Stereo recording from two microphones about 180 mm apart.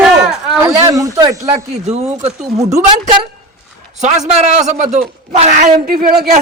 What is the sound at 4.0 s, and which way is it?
A man's voice, 40° right (ahead or behind).